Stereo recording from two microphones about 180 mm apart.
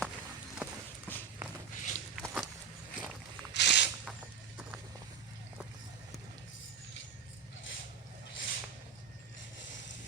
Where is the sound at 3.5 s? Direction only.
70° left (ahead or behind).